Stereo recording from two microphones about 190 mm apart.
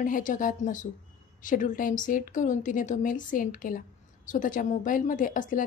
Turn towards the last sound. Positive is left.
turn(degrees=45)  # may be behind; listen again after turning